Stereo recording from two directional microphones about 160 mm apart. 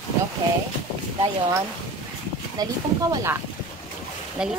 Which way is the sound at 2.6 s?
25° right (ahead or behind).